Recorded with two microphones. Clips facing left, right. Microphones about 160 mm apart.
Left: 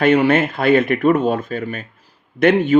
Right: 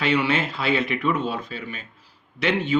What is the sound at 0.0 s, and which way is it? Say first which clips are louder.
A man's voice: left 8 dB; 50° left (ahead or behind).